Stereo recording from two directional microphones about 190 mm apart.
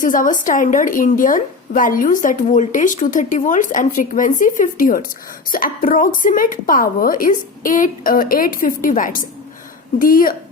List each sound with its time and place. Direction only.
0.0 s a woman's voice: 45° left (ahead or behind)